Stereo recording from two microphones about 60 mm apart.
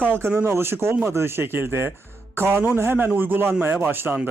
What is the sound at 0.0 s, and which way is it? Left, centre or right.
Speech, right.